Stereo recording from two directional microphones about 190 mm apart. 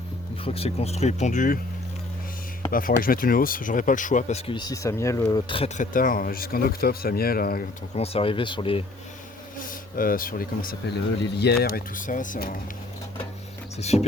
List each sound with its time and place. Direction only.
0.4 s speech: 30° left (ahead or behind)
2.6 s speech: 45° left (ahead or behind)
7.9 s speech: 30° left (ahead or behind)
9.6 s speech: 45° left (ahead or behind)
13.7 s speech: 35° left (ahead or behind)